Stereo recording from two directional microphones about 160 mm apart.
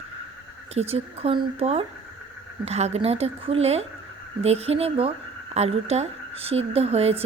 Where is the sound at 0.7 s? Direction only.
40° right (ahead or behind).